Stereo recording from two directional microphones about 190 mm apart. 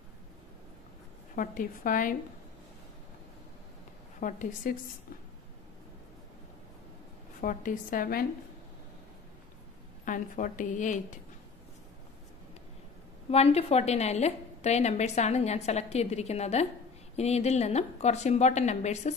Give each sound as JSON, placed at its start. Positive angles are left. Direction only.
{"t": 1.3, "sound": "a woman's voice", "side_deg": 45}
{"t": 4.2, "sound": "a woman's voice", "side_deg": 40}
{"t": 7.4, "sound": "a woman's voice", "side_deg": 45}
{"t": 10.0, "sound": "a woman's voice", "side_deg": 45}
{"t": 13.3, "sound": "a woman's voice", "side_deg": 30}